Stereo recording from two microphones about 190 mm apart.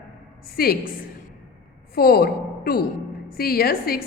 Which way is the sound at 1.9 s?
55° left (ahead or behind).